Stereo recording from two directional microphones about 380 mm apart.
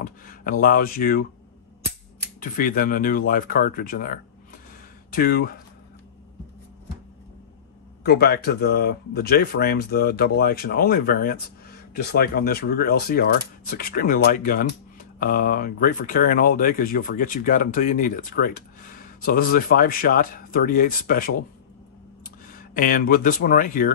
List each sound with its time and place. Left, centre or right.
0.0 s speech: left
2.4 s speech: left
8.0 s speech: left
22.8 s speech: left